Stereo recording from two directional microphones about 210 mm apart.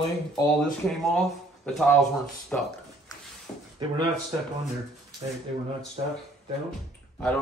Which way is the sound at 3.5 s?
20° left (ahead or behind).